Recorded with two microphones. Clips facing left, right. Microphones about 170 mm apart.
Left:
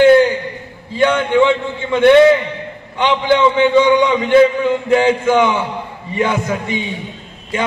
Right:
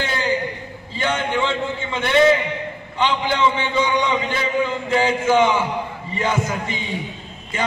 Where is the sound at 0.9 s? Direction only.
60° left (ahead or behind).